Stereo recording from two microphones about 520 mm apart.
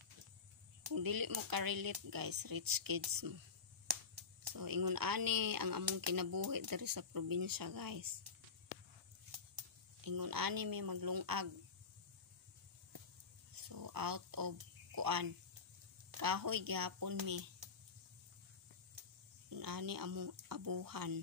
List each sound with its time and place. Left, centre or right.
0.8 s speech: right
4.5 s speech: right
10.0 s speech: right
13.6 s a sound: right
15.0 s speech: right
19.5 s speech: right